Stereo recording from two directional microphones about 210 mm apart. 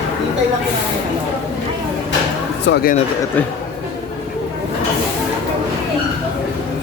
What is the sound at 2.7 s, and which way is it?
Speech, 45° left (ahead or behind).